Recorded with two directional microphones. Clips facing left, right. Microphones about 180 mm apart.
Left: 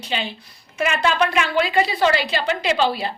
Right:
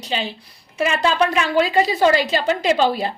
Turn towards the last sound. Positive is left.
turn(degrees=-45)  # may be behind; listen again after turning